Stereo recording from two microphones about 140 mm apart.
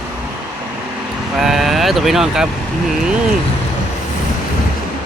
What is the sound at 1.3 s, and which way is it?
Speech, centre (ahead or behind).